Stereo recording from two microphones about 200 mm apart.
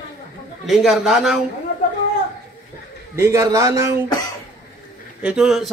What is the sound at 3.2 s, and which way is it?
Speech, 15° right (ahead or behind).